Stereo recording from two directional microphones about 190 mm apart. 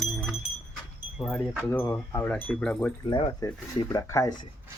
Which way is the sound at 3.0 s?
25° left (ahead or behind).